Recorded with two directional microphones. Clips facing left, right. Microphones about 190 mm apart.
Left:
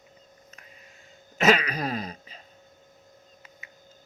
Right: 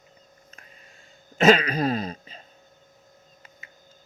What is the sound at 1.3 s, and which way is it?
Throat clearing, 30° right (ahead or behind).